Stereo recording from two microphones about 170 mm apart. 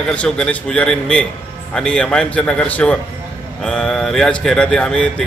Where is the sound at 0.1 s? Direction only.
5° left (ahead or behind).